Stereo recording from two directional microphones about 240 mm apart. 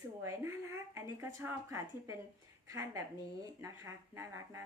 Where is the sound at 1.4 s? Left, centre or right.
Centre.